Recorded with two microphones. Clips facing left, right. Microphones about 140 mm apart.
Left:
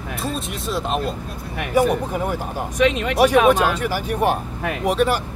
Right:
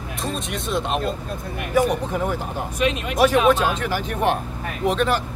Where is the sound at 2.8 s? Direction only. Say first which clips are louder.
Left 5 dB; 75° left (ahead or behind).